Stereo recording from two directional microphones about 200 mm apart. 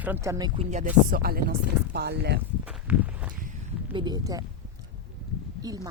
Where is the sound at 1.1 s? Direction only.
50° right (ahead or behind).